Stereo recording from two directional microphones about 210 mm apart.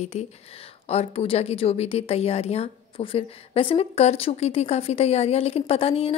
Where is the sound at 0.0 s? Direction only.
30° left (ahead or behind).